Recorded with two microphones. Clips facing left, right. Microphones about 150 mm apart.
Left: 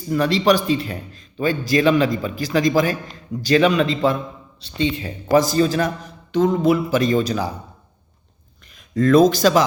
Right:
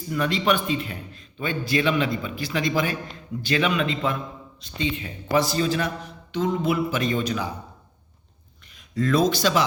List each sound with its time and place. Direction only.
0.1 s a man's voice: 35° left (ahead or behind)
8.7 s speech: 50° left (ahead or behind)